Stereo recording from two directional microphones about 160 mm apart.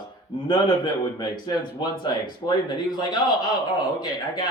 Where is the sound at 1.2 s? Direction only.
25° left (ahead or behind).